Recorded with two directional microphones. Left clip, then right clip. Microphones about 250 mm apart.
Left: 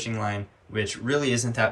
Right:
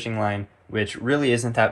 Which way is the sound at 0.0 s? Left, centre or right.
Centre.